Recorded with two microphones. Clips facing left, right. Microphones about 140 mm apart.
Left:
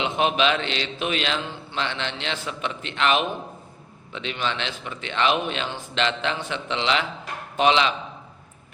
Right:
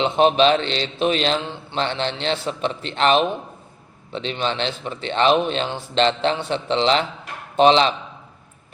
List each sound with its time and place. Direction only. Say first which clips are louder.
0.0 s speech: right 6 dB; 35° right (ahead or behind)